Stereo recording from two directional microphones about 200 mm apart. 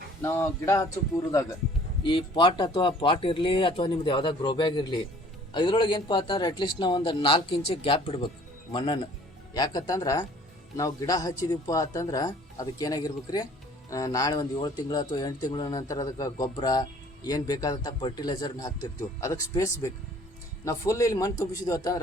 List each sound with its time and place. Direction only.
0.2 s speech: 15° left (ahead or behind)
2.0 s speech: 25° left (ahead or behind)